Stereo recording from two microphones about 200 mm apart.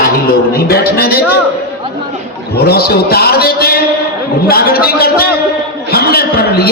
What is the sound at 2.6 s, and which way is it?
A man's voice, 50° left (ahead or behind).